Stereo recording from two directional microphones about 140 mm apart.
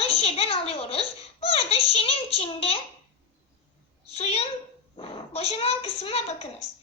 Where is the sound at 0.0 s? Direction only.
45° left (ahead or behind).